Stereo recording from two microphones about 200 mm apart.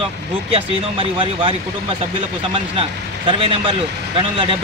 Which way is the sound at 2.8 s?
25° right (ahead or behind).